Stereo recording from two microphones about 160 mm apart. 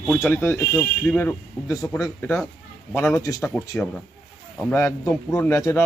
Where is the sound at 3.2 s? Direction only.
20° left (ahead or behind).